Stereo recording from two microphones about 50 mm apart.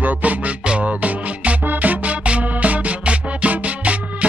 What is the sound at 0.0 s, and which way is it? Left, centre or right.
Music, right.